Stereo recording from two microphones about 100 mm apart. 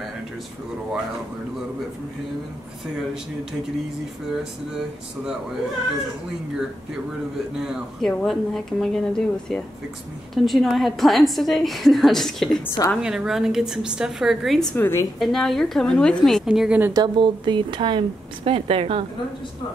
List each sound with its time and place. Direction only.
4.4 s a woman's voice: 5° right (ahead or behind)
7.5 s a woman's voice: 5° right (ahead or behind)
8.1 s a woman's voice: 5° left (ahead or behind)
14.8 s a woman's voice: 25° left (ahead or behind)
15.1 s a woman's voice: centre (ahead or behind)
16.4 s a woman's voice: 10° right (ahead or behind)
16.9 s speech: 50° right (ahead or behind); by 19.0 s 75° right (ahead or behind)